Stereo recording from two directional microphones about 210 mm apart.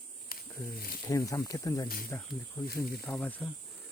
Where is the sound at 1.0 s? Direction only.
15° left (ahead or behind).